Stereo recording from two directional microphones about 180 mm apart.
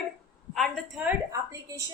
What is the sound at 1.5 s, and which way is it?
Speech, 20° right (ahead or behind).